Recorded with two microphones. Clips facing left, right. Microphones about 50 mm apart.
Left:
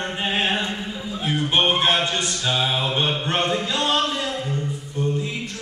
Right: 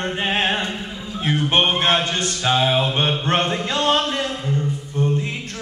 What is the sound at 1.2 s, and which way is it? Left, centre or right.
Music, right.